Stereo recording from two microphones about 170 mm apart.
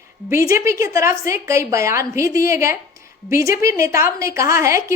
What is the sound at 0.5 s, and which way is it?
A woman's voice, 15° right (ahead or behind).